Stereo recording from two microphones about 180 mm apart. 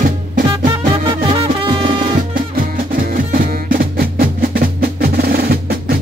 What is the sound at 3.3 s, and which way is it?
Music, 50° right (ahead or behind).